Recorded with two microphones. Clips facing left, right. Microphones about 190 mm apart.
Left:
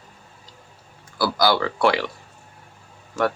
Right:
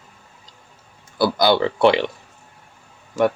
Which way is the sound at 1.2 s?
20° right (ahead or behind).